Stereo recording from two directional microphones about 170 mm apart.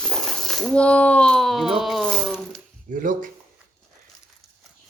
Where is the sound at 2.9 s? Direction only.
50° right (ahead or behind).